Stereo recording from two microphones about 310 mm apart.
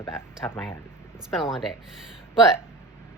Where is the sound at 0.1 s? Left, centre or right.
Centre.